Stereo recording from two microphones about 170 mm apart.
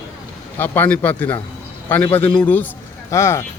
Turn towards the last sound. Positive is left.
turn(degrees=15)  # may be behind; listen again after turning